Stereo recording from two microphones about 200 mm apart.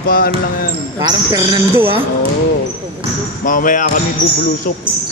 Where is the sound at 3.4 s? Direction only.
40° left (ahead or behind).